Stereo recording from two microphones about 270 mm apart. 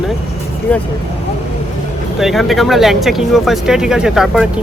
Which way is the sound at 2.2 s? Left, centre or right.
Centre.